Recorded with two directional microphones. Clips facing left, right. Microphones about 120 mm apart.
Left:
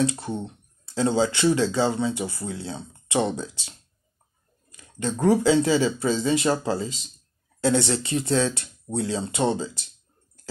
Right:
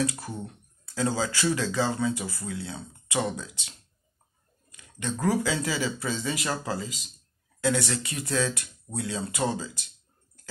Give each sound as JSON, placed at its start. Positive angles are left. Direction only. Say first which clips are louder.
{"t": 0.0, "sound": "speech", "louder": "left 5 dB", "side_deg": 25}
{"t": 4.6, "sound": "a sound", "louder": "left 5 dB", "side_deg": 30}
{"t": 5.2, "sound": "speech", "louder": "left 8 dB", "side_deg": 30}